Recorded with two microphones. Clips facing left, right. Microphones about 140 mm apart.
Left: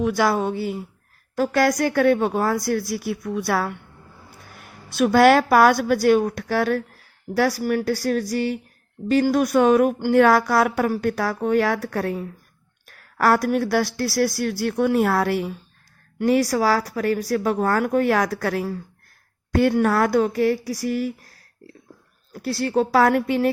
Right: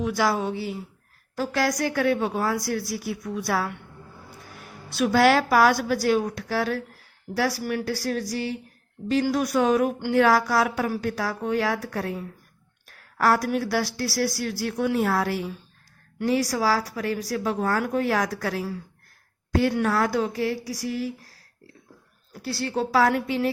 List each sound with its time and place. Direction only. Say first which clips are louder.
0.0 s a woman's voice: left 4 dB; 55° left (ahead or behind)
4.9 s a woman's voice: left 4 dB; 50° left (ahead or behind)
13.1 s a woman's voice: left 3 dB; 60° left (ahead or behind)
22.3 s a woman's voice: left 5 dB; 50° left (ahead or behind)